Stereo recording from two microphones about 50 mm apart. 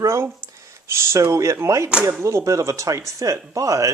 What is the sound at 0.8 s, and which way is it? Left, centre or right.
Speech, right.